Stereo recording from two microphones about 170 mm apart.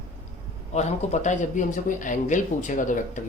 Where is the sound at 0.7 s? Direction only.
40° left (ahead or behind).